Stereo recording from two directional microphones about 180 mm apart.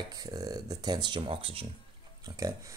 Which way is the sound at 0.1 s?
20° right (ahead or behind).